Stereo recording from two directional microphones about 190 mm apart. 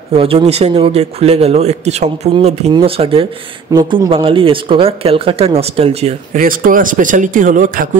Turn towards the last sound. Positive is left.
turn(degrees=-45)  # may be behind; listen again after turning